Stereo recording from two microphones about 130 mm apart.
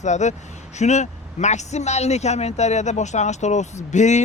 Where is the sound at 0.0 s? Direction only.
65° left (ahead or behind).